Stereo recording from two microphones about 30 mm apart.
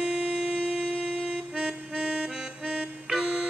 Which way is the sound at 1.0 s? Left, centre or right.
Centre.